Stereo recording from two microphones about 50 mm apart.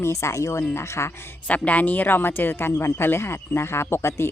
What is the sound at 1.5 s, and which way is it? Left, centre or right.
Speech, left.